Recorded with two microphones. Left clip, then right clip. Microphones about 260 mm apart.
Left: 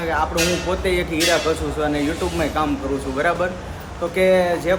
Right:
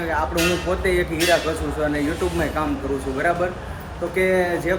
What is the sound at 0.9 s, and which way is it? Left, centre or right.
Speech, centre.